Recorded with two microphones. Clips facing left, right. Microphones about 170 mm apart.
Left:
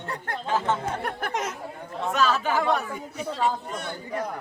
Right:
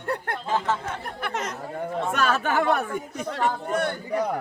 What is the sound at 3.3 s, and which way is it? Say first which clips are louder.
Speech: right 2 dB; 60° right (ahead or behind).